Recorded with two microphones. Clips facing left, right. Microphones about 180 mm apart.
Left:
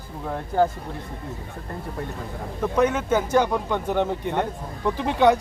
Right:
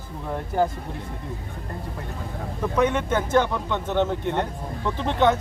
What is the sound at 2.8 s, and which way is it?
Speech, 10° left (ahead or behind).